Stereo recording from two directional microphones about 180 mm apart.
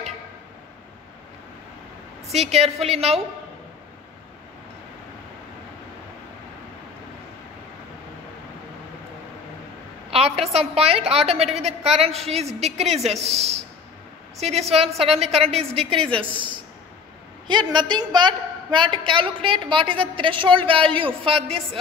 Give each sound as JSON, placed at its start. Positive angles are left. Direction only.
{"t": 2.3, "sound": "a woman's voice", "side_deg": -35}
{"t": 10.1, "sound": "a woman's voice", "side_deg": -35}